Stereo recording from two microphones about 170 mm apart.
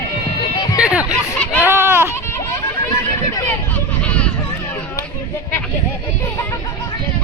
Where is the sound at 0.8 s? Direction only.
5° right (ahead or behind).